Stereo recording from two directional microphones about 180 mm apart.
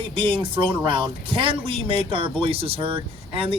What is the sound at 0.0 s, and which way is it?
Speech, 30° right (ahead or behind).